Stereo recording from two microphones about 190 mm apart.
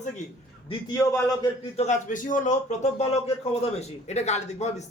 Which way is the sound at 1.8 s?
40° left (ahead or behind).